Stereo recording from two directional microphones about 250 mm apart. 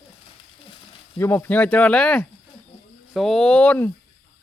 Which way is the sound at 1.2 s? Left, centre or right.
Centre.